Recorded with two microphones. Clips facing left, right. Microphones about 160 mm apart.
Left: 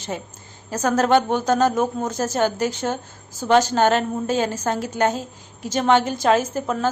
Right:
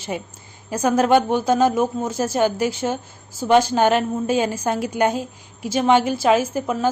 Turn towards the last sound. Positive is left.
turn(degrees=-10)  # may be behind; listen again after turning